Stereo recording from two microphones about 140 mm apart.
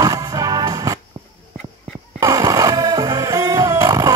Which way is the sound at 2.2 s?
25° right (ahead or behind).